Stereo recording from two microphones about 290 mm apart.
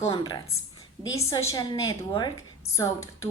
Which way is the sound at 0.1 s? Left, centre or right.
Centre.